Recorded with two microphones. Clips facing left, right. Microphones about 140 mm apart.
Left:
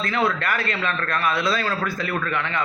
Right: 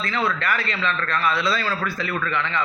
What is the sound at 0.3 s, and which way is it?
Speech, 50° left (ahead or behind).